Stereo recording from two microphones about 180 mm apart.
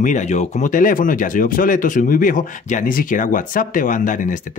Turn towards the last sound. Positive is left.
turn(degrees=45)  # may be behind; listen again after turning